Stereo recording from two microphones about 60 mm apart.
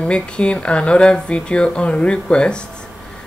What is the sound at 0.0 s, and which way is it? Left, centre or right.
Speech, centre.